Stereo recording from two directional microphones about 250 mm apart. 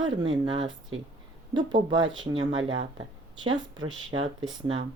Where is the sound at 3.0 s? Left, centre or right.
Centre.